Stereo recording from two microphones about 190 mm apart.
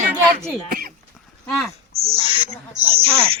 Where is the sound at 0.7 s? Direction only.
50° right (ahead or behind).